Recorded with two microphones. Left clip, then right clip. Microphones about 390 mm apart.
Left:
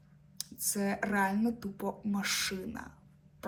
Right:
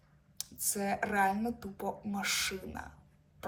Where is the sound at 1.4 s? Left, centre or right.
Right.